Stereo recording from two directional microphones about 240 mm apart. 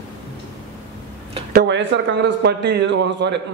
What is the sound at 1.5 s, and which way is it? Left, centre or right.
A man's voice, right.